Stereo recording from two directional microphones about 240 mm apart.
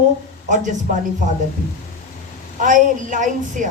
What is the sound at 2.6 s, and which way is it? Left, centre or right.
A woman's voice, right.